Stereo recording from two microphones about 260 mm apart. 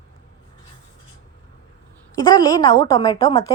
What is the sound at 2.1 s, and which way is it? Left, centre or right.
A woman's voice, centre.